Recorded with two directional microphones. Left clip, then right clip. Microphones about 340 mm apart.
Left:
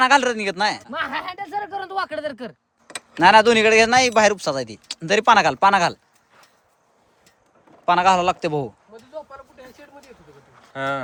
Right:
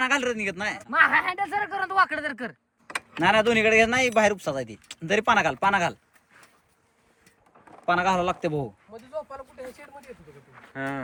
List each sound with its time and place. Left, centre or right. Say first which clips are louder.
0.0 s a man's voice: left 8 dB; centre
7.9 s a man's voice: left 7 dB; centre
10.6 s a sound: left 7 dB; centre